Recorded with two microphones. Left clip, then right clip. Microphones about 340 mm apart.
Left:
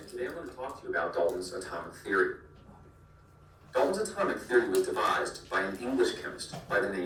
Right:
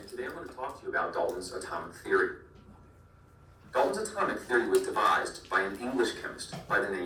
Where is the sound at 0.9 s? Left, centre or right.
Centre.